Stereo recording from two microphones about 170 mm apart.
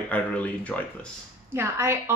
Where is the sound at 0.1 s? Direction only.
10° left (ahead or behind).